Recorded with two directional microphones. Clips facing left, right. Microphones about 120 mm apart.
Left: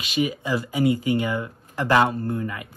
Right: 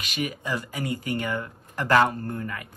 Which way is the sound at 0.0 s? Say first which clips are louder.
Left 6 dB; 15° left (ahead or behind).